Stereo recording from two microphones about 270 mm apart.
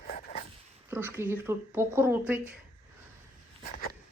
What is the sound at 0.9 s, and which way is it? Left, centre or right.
Speech, centre.